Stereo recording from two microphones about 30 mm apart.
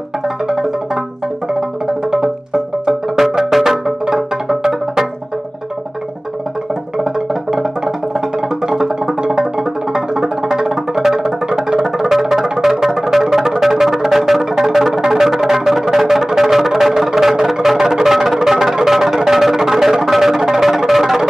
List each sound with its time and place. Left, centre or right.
2.9 s music: centre
8.7 s music: centre